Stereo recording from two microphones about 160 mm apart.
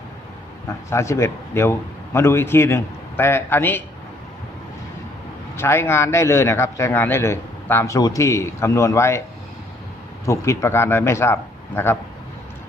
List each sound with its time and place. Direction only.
0.9 s a man's voice: 15° left (ahead or behind)
5.5 s a man's voice: 15° left (ahead or behind)
10.2 s a man's voice: 20° left (ahead or behind)